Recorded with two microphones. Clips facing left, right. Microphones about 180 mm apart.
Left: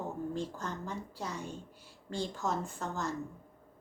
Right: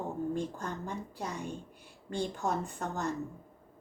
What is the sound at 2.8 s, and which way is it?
Speech, 60° right (ahead or behind).